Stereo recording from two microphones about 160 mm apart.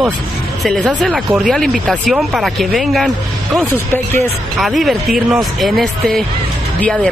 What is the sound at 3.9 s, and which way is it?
Speech, 15° left (ahead or behind).